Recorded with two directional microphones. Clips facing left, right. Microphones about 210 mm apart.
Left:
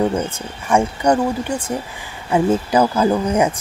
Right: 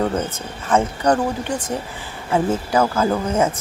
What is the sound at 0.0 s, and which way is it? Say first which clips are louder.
Speech: left 2 dB; 10° left (ahead or behind).